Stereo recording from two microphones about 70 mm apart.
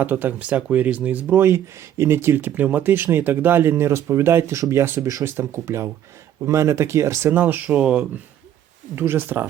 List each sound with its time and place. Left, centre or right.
0.0 s speech: right
1.4 s speech: right
4.9 s speech: right
5.2 s speech: right
7.3 s speech: right
9.0 s speech: right